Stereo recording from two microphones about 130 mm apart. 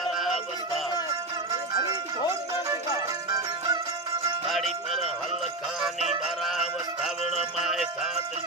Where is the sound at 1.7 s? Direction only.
35° right (ahead or behind).